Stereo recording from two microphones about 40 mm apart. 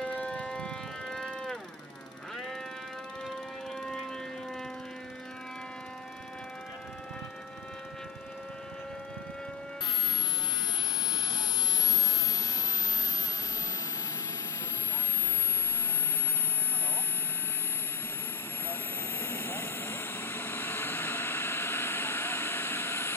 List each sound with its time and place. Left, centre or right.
0.0 s siren: left
1.0 s a sound: centre
18.7 s vehicle: left